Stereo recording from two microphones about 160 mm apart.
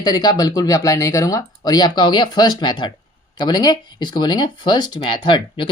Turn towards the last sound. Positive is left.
turn(degrees=30)  # may be behind; listen again after turning